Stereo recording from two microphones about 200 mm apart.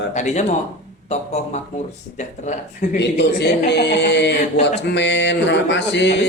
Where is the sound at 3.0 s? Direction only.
60° left (ahead or behind).